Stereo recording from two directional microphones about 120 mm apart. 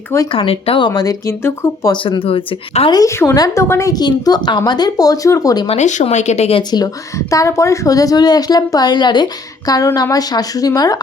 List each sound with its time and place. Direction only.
0.3 s speech: 50° left (ahead or behind)
0.9 s speech: 35° left (ahead or behind)
1.3 s speech: 20° left (ahead or behind)
1.9 s speech: 45° left (ahead or behind)
2.9 s speech: 25° left (ahead or behind)
5.6 s speech: 75° left (ahead or behind)
6.6 s speech: 35° left (ahead or behind)